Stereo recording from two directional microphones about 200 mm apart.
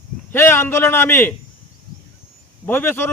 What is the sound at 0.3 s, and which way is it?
Speech, 10° left (ahead or behind).